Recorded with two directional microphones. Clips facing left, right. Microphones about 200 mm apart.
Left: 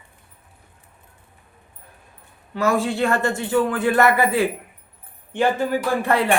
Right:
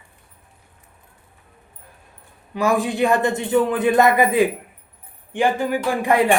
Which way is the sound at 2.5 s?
15° right (ahead or behind).